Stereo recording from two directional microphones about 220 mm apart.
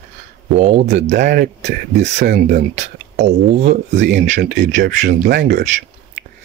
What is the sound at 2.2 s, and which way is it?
Speech, 45° right (ahead or behind).